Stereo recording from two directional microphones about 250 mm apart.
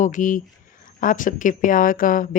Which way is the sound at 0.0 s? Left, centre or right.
Left.